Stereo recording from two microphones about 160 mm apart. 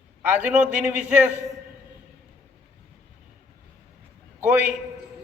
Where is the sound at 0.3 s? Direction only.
10° right (ahead or behind).